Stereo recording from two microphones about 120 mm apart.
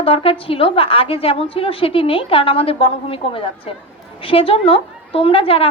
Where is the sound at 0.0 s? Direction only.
50° left (ahead or behind).